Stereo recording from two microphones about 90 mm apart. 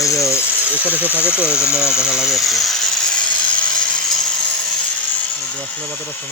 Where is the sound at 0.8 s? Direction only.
20° right (ahead or behind); by 2.7 s centre (ahead or behind).